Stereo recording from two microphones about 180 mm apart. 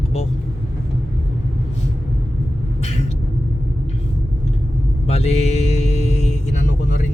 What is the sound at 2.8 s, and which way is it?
Vehicle, 35° left (ahead or behind).